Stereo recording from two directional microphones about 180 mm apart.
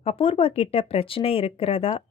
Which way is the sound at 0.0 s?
30° left (ahead or behind).